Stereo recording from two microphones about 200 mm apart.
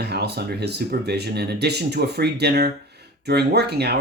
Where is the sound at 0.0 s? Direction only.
55° right (ahead or behind).